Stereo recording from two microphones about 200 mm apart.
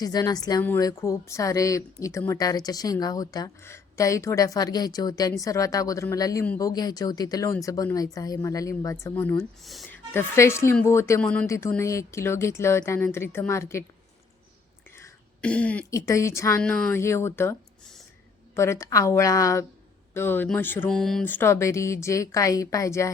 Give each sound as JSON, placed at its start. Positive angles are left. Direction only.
{"t": 0.0, "sound": "speech", "side_deg": 20}
{"t": 14.9, "sound": "speech", "side_deg": 10}